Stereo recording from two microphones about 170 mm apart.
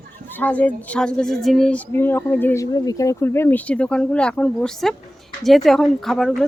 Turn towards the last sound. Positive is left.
turn(degrees=0)  # may be behind; listen again after turning